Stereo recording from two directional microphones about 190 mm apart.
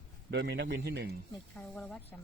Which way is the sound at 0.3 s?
65° right (ahead or behind).